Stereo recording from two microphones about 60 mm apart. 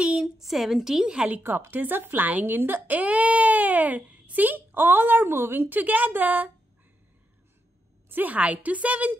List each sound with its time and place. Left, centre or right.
0.2 s a woman's voice: centre
1.4 s speech: right
8.1 s a woman's voice: right